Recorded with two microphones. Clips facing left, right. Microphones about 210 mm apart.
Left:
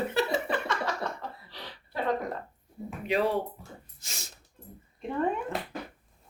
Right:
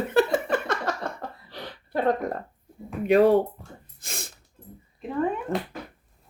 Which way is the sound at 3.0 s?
50° right (ahead or behind).